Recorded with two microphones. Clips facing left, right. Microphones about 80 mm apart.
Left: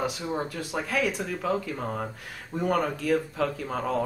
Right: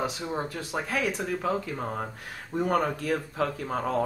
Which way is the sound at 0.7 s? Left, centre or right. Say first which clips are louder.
Left 1 dB; right.